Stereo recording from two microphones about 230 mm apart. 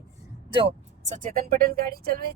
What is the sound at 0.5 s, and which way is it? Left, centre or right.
Speech, right.